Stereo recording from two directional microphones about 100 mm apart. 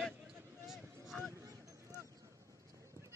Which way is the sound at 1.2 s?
35° right (ahead or behind).